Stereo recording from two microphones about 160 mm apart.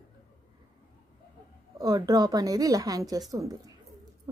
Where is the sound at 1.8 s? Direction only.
25° right (ahead or behind).